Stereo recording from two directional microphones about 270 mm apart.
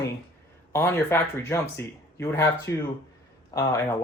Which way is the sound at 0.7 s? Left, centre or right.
Centre.